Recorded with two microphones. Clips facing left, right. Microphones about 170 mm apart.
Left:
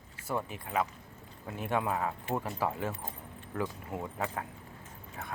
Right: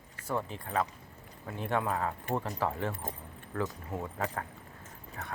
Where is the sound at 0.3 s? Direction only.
10° left (ahead or behind).